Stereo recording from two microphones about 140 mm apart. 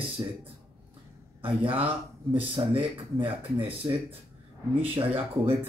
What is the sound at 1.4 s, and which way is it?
Speech, 40° right (ahead or behind).